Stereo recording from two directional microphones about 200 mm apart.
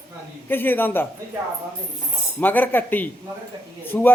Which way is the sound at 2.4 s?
10° left (ahead or behind).